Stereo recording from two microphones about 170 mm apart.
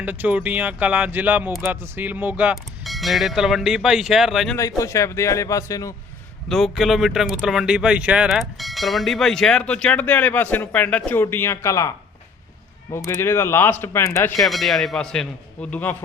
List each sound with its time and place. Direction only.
0.0 s speech: 10° right (ahead or behind)
4.8 s speech: 20° left (ahead or behind)
6.5 s speech: centre (ahead or behind); by 11.9 s 20° left (ahead or behind)
13.1 s speech: 15° left (ahead or behind)
14.4 s speech: centre (ahead or behind)